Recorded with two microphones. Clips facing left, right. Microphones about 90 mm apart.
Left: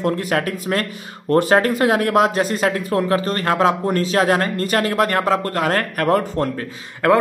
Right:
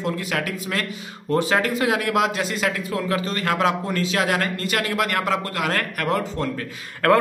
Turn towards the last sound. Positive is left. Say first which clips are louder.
# left 2 dB
turn(degrees=20)  # may be behind; listen again after turning